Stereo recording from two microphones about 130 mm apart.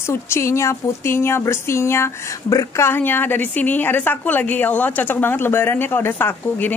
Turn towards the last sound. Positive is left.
turn(degrees=15)  # may be behind; listen again after turning